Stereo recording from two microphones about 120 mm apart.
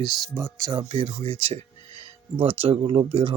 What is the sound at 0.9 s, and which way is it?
Speech, 45° right (ahead or behind).